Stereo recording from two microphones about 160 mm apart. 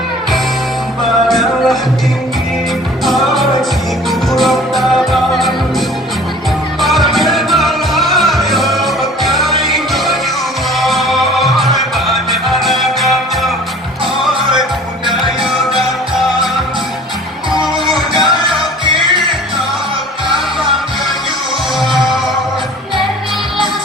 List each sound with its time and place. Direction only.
1.3 s music: centre (ahead or behind)
3.0 s music: centre (ahead or behind)
6.8 s music: centre (ahead or behind)
15.7 s music: centre (ahead or behind)
17.9 s music: centre (ahead or behind)
18.9 s music: 30° right (ahead or behind)